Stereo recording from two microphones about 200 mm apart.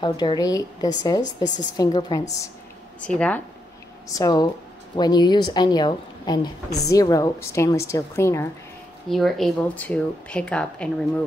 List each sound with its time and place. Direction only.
0.0 s a woman's voice: 20° left (ahead or behind)
3.0 s speech: 5° left (ahead or behind)
4.1 s a woman's voice: 20° left (ahead or behind)
9.1 s speech: centre (ahead or behind)